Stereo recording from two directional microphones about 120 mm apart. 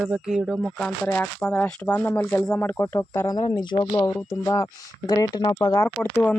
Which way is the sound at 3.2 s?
35° left (ahead or behind).